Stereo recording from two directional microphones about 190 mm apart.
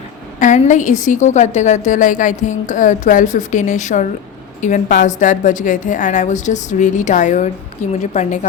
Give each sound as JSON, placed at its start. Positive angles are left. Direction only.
{"t": 0.3, "sound": "a woman's voice", "side_deg": 40}